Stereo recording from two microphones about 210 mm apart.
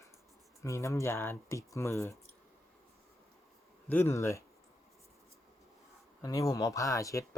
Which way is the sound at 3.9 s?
10° left (ahead or behind).